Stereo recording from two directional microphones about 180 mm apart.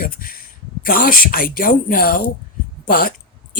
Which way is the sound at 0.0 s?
55° left (ahead or behind).